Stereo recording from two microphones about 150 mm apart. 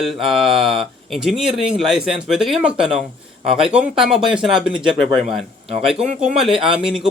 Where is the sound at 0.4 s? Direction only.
35° right (ahead or behind).